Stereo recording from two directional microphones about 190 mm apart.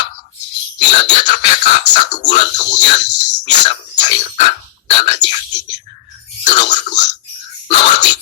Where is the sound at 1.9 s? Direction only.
40° left (ahead or behind).